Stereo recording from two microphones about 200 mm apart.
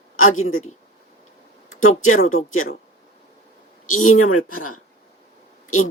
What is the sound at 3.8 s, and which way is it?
Speech, 90° left.